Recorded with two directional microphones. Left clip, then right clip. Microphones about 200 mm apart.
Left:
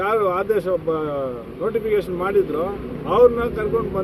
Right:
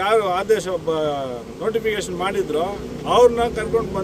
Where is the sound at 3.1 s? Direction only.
35° right (ahead or behind).